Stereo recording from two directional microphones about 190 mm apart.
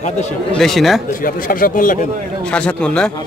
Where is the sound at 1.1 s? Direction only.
45° left (ahead or behind).